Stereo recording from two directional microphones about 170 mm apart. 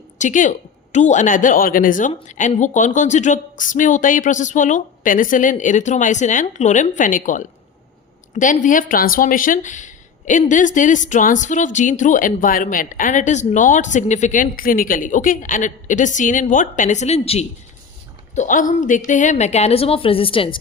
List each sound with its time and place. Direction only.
0.2 s speech: 50° left (ahead or behind)
18.3 s a woman's voice: 50° left (ahead or behind); by 20.6 s 30° left (ahead or behind)